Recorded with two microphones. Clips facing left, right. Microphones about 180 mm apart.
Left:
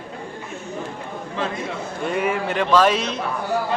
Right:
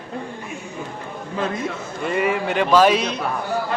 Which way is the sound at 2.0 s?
Centre (ahead or behind).